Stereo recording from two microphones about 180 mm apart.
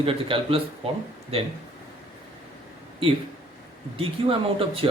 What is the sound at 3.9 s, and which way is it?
Speech, 30° right (ahead or behind).